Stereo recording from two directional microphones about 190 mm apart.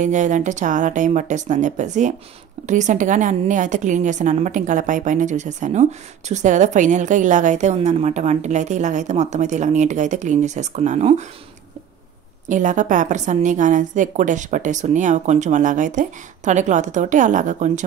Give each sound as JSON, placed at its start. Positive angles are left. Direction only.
{"t": 0.0, "sound": "a woman's voice", "side_deg": -40}
{"t": 12.4, "sound": "a woman's voice", "side_deg": -40}